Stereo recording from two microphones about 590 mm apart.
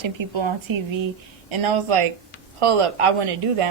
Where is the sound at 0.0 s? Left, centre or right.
Right.